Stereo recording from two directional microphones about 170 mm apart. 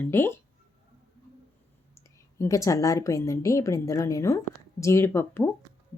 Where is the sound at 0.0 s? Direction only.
15° left (ahead or behind).